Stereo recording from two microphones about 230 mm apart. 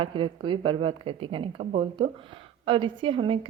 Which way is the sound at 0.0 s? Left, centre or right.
Right.